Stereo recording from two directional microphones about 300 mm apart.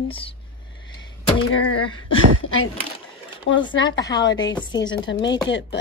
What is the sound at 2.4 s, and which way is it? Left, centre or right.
Speech, left.